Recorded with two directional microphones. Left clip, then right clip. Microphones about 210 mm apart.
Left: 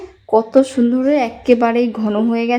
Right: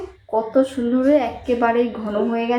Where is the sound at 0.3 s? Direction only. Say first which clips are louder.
Left 6 dB; 55° left (ahead or behind).